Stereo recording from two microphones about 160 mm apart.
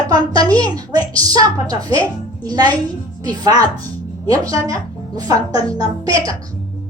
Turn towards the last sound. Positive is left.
turn(degrees=-20)  # may be behind; listen again after turning